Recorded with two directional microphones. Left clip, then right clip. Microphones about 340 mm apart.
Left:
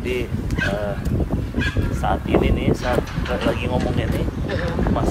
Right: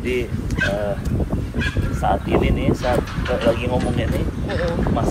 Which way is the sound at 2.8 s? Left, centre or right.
Left.